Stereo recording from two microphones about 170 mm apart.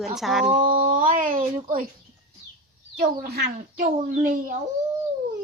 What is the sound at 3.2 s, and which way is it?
Speech, 70° right (ahead or behind).